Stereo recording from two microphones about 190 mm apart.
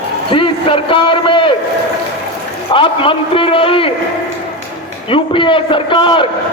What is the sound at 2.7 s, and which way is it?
A man's voice, 25° left (ahead or behind).